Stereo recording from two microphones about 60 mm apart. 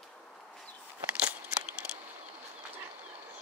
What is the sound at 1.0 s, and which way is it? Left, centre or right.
Scissors, right.